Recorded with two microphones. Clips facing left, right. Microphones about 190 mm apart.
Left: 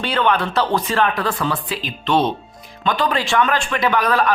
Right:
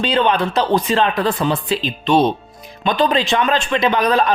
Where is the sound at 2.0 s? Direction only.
15° right (ahead or behind).